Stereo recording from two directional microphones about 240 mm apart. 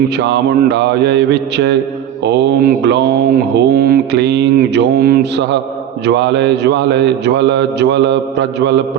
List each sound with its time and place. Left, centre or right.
0.2 s mantra: right